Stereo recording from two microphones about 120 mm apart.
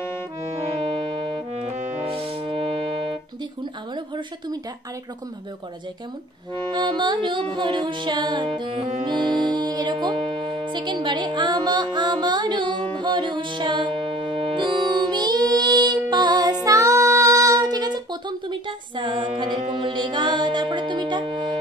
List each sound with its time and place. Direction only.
1.5 s music: 70° right (ahead or behind)
2.0 s music: 50° right (ahead or behind)
3.9 s music: 40° right (ahead or behind)
6.7 s music: 40° right (ahead or behind)